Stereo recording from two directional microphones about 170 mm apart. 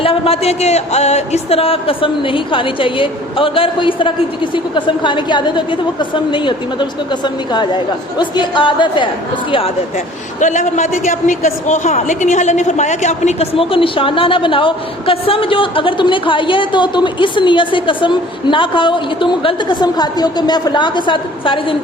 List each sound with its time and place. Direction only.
0.0 s a man's voice: 35° left (ahead or behind)
10.4 s a man's voice: 45° left (ahead or behind)